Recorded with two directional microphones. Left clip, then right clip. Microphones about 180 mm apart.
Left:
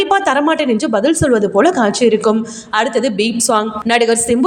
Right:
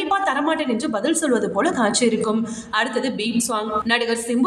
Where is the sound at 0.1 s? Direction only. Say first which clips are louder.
Left 3 dB; 35° left (ahead or behind).